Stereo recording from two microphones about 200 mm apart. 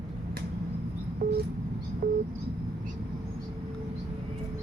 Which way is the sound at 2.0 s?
50° right (ahead or behind).